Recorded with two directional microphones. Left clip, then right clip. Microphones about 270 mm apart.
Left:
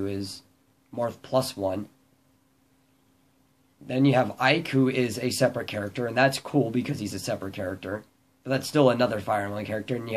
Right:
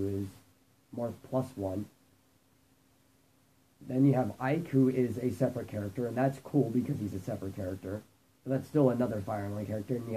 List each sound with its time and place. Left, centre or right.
0.9 s speech: left
3.8 s speech: centre